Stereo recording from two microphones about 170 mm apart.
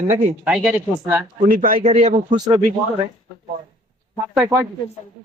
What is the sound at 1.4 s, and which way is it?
Speech, 55° right (ahead or behind).